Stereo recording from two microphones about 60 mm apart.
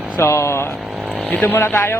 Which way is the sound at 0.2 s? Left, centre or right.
Left.